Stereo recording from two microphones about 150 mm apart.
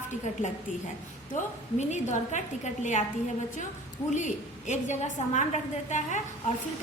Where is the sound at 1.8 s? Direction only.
50° left (ahead or behind).